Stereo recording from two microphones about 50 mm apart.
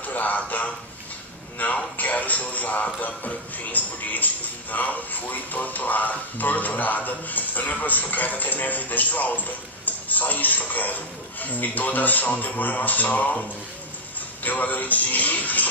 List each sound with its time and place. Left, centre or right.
0.0 s speech: left
14.4 s speech: left